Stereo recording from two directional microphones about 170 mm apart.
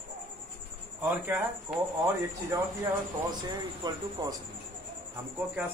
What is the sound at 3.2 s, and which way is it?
Speech, 25° right (ahead or behind).